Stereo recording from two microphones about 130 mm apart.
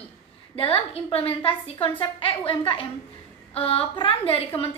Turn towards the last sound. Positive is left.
turn(degrees=45)  # may be behind; listen again after turning